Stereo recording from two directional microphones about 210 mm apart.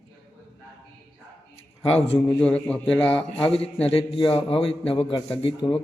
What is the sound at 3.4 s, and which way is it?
A man's voice, 25° left (ahead or behind).